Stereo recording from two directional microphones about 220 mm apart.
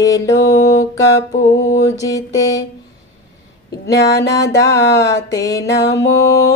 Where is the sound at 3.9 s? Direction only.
50° left (ahead or behind).